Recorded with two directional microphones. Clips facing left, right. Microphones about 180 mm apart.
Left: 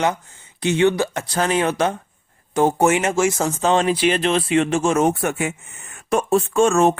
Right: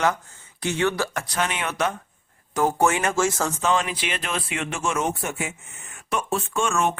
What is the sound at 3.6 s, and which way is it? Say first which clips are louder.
Speech: left 8 dB; 35° left (ahead or behind).